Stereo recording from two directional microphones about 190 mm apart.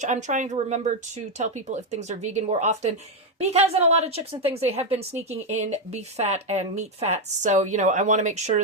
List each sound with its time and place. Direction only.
0.0 s speech: 40° right (ahead or behind)